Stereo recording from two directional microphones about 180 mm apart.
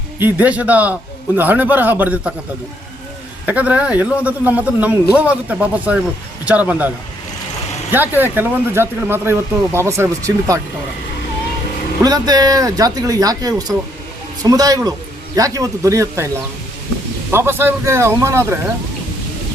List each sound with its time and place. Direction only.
0.2 s a man's voice: 10° right (ahead or behind)
3.4 s a man's voice: 10° right (ahead or behind)
7.9 s a man's voice: 10° right (ahead or behind)
12.0 s a man's voice: 20° right (ahead or behind)
17.3 s a man's voice: 10° right (ahead or behind)